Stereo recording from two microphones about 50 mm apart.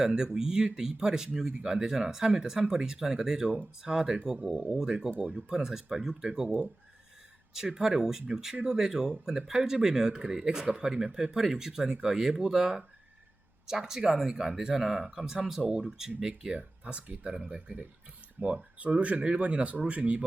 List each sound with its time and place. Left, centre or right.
0.0 s speech: centre
7.5 s speech: centre
16.6 s speech: right
18.4 s speech: right